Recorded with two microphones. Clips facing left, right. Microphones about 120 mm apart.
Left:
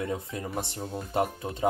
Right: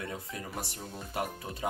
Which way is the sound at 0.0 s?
25° left (ahead or behind).